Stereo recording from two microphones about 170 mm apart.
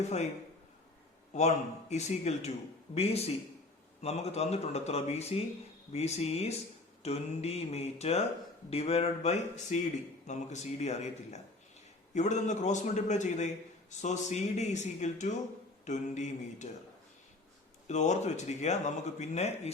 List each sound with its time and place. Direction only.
1.3 s a man's voice: 40° left (ahead or behind)
17.8 s speech: 45° left (ahead or behind)